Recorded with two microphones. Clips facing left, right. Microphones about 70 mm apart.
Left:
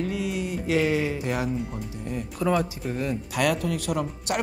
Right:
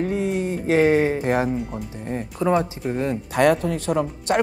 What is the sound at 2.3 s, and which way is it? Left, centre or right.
A woman's voice, right.